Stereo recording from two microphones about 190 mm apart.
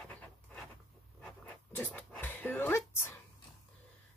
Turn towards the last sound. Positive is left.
turn(degrees=10)  # may be behind; listen again after turning